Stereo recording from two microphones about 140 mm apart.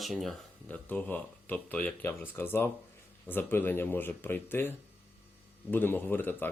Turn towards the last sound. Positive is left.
turn(degrees=15)  # may be behind; listen again after turning